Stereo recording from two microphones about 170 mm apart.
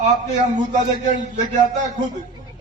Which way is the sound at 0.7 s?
45° right (ahead or behind).